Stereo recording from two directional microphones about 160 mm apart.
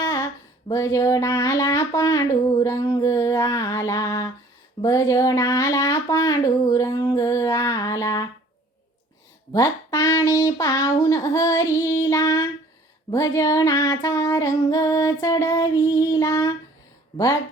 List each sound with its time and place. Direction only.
0.0 s a sound: 20° left (ahead or behind)
0.7 s speech: 20° left (ahead or behind)
9.5 s speech: 20° left (ahead or behind)